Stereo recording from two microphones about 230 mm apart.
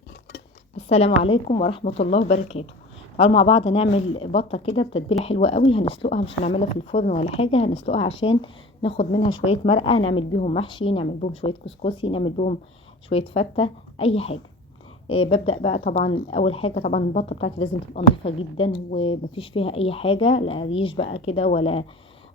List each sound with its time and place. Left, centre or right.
0.8 s speech: left